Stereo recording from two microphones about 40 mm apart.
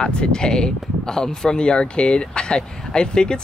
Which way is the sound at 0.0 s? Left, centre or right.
Left.